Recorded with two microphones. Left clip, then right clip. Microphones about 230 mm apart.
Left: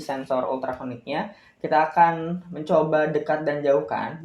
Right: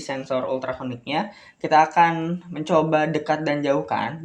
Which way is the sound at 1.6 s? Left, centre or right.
Right.